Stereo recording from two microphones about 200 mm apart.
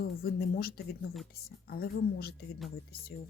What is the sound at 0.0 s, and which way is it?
Speech, 50° left (ahead or behind).